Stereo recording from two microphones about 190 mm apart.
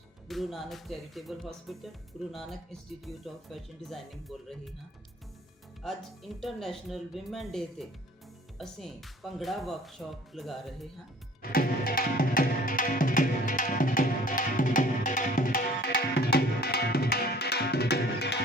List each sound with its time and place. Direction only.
0.3 s speech: centre (ahead or behind)
5.8 s speech: centre (ahead or behind)
11.5 s music: 50° left (ahead or behind)